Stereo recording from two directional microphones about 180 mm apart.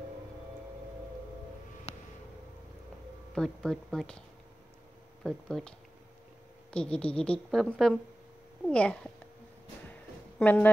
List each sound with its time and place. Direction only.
3.3 s speech: 5° left (ahead or behind)
5.2 s speech: 5° left (ahead or behind)
10.4 s a woman's voice: 10° left (ahead or behind)